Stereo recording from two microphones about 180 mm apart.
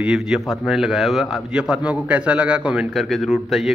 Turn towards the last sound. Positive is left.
turn(degrees=0)  # may be behind; listen again after turning